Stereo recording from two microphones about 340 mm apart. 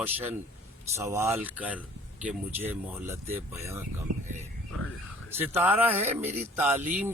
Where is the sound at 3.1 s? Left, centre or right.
Centre.